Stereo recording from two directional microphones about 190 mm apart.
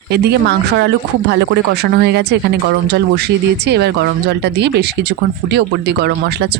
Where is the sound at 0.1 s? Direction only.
60° right (ahead or behind).